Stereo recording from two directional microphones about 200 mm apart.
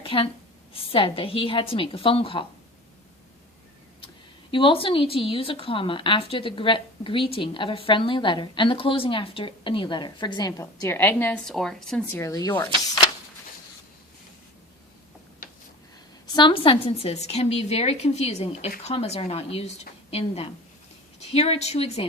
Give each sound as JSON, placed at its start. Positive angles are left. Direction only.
{"t": 0.0, "sound": "a woman's voice", "side_deg": 25}
{"t": 4.5, "sound": "speech", "side_deg": 25}
{"t": 16.2, "sound": "a woman's voice", "side_deg": 20}